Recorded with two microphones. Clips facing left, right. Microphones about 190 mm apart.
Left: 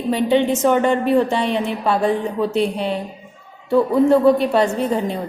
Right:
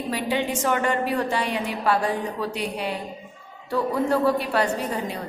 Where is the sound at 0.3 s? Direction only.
25° left (ahead or behind).